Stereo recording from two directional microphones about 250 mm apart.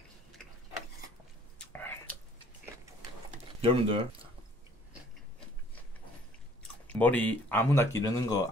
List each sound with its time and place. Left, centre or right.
0.4 s tick-tock: centre
1.6 s whispering: centre
3.6 s speech: right
6.6 s speech: centre